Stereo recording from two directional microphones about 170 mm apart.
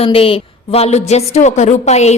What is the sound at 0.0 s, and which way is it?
A woman's voice, 35° left (ahead or behind).